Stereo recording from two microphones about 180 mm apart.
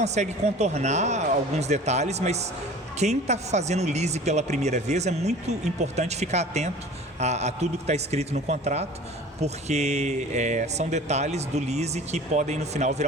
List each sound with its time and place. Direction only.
0.0 s speech: 40° right (ahead or behind)